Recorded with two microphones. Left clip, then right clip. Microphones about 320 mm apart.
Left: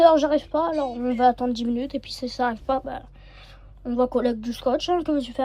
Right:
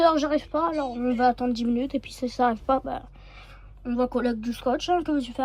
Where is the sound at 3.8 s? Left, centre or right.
Centre.